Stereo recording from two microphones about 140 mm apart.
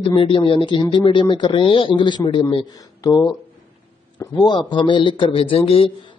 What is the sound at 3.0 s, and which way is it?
Speech, 25° left (ahead or behind).